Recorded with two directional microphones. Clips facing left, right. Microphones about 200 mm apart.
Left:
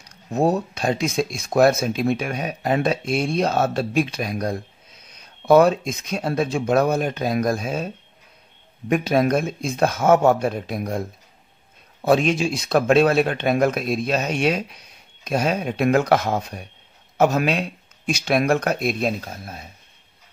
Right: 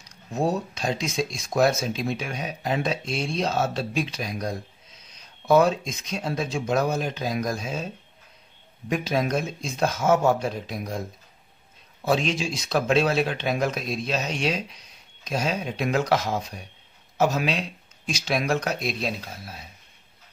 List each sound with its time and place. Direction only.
0.0 s speech: 55° left (ahead or behind)
12.0 s speech: 55° left (ahead or behind)